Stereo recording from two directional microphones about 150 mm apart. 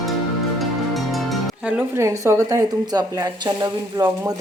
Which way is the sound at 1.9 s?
20° right (ahead or behind).